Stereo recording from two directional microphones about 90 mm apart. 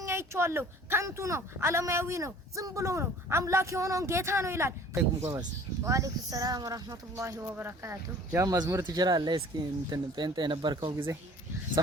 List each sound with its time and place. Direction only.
0.0 s speech: 30° right (ahead or behind)
8.4 s speech: 45° right (ahead or behind)
10.9 s speech: 35° right (ahead or behind)